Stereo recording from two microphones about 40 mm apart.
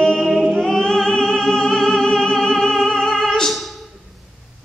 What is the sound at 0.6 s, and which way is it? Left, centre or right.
Music, centre.